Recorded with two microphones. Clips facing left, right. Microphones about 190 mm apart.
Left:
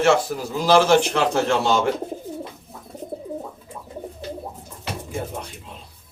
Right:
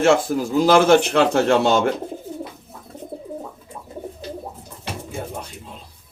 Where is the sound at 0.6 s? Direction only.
55° right (ahead or behind).